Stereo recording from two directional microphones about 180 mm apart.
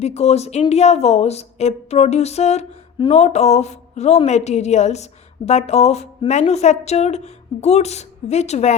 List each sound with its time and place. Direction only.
0.0 s speech: 35° left (ahead or behind)